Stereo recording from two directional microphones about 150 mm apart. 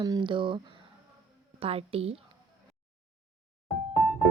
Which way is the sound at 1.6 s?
40° right (ahead or behind).